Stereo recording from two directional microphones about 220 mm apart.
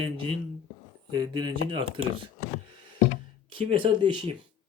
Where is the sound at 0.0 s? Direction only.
25° right (ahead or behind).